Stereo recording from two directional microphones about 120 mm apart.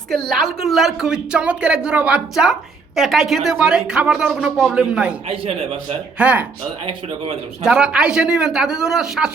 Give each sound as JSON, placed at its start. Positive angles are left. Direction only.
{"t": 0.1, "sound": "a woman's voice", "side_deg": 0}
{"t": 5.3, "sound": "a man's voice", "side_deg": -55}
{"t": 6.1, "sound": "a woman's voice", "side_deg": -10}
{"t": 7.6, "sound": "speech", "side_deg": -5}